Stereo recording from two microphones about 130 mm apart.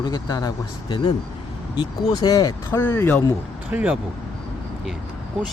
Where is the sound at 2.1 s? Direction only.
30° left (ahead or behind).